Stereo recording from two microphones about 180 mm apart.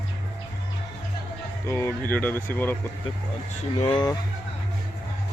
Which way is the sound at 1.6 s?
15° left (ahead or behind).